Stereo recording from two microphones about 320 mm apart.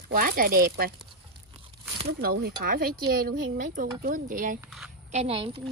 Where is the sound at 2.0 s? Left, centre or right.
Right.